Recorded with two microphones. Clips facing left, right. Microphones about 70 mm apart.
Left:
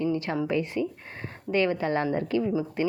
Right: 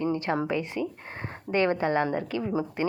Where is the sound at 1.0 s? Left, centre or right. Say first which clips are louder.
Even; right.